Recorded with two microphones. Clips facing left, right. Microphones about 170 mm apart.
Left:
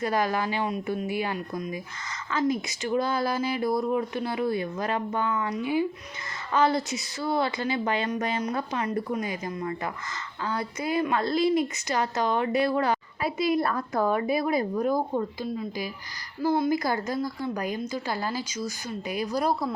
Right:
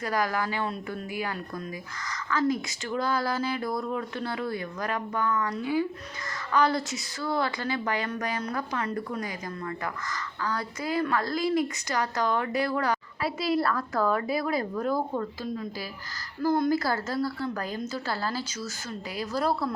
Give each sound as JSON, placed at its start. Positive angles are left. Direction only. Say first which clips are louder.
{"t": 0.0, "sound": "a woman's voice", "louder": "left 2 dB", "side_deg": 25}